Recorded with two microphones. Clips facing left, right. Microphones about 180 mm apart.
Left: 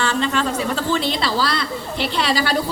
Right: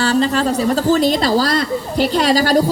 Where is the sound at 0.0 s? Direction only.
40° right (ahead or behind).